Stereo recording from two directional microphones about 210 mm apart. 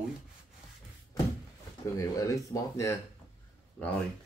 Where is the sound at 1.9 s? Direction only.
15° left (ahead or behind).